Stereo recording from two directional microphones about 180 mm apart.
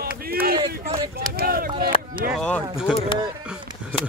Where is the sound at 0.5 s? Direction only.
25° right (ahead or behind).